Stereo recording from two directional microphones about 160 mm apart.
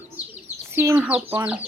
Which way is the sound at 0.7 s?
10° right (ahead or behind).